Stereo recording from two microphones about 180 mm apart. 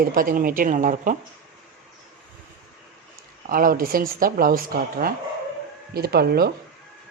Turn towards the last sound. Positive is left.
turn(degrees=-60)  # may be behind; listen again after turning